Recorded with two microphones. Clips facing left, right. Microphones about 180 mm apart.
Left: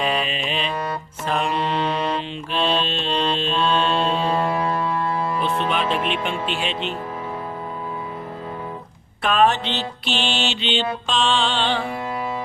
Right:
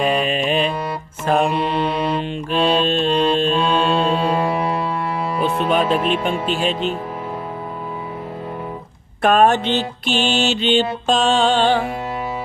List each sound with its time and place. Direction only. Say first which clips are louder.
0.0 s mantra: right 5 dB; 50° right (ahead or behind)
1.5 s music: right 3 dB; 10° right (ahead or behind)
2.6 s mantra: right 5 dB; 10° right (ahead or behind)
2.8 s music: right 8 dB; 45° right (ahead or behind)
3.1 s music: right 4 dB; 10° right (ahead or behind)
3.5 s mantra: right 3 dB; 10° right (ahead or behind)
5.6 s speech: right 5 dB; 45° right (ahead or behind)
9.2 s mantra: right 4 dB; 50° right (ahead or behind)